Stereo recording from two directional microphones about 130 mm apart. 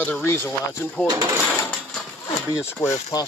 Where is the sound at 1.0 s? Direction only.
25° right (ahead or behind).